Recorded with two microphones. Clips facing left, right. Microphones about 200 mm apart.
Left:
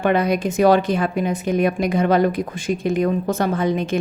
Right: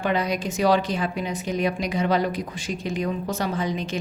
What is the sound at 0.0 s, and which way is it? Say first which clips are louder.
Speech: left 6 dB; 55° left (ahead or behind).